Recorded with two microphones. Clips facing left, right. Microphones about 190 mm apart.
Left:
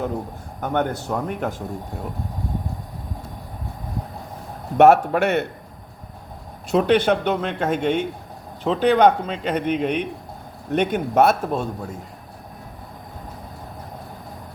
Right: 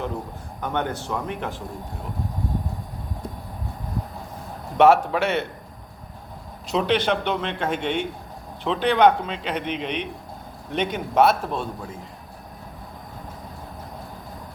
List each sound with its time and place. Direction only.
0.6 s a man's voice: 45° left (ahead or behind)
4.8 s a man's voice: 45° left (ahead or behind)
6.7 s a man's voice: 50° left (ahead or behind)